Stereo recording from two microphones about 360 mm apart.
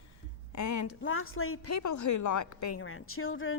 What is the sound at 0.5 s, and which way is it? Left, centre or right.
Speech, left.